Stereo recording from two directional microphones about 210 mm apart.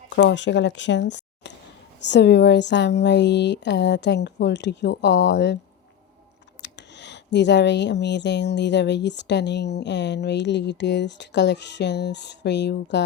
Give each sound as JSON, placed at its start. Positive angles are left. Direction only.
{"t": 0.2, "sound": "speech", "side_deg": 55}
{"t": 6.6, "sound": "speech", "side_deg": 55}